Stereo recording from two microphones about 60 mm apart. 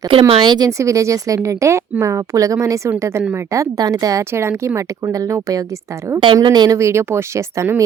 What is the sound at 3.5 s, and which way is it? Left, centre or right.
A woman's voice, right.